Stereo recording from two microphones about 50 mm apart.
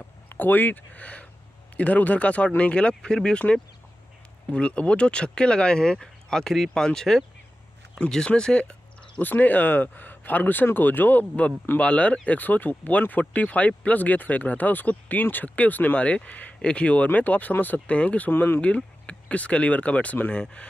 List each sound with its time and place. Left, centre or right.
0.3 s speech: left; by 8.7 s centre
9.2 s speech: left
11.8 s speech: left
17.7 s speech: left
18.3 s speech: left
19.0 s speech: left